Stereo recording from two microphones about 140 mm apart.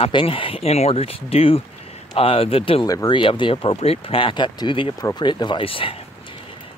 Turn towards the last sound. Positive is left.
turn(degrees=40)  # may be behind; listen again after turning